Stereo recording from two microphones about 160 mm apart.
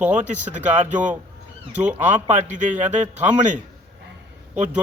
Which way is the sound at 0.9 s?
10° right (ahead or behind).